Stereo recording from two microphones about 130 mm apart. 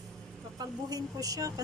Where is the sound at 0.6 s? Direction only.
30° right (ahead or behind).